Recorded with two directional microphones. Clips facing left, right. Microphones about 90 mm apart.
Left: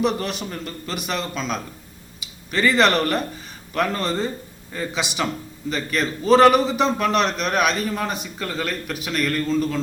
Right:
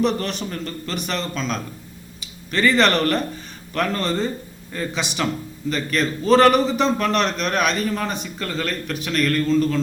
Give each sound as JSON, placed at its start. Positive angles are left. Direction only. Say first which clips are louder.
{"t": 0.0, "sound": "a man's voice", "louder": "right 1 dB", "side_deg": 5}